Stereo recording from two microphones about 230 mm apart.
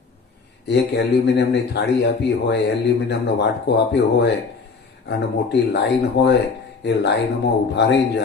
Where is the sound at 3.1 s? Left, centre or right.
Left.